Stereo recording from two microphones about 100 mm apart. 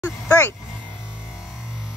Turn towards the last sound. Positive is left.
turn(degrees=25)  # may be behind; listen again after turning